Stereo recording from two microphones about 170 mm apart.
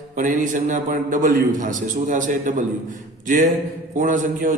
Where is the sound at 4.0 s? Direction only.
50° right (ahead or behind).